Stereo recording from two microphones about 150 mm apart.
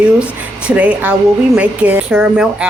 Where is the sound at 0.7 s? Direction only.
10° right (ahead or behind).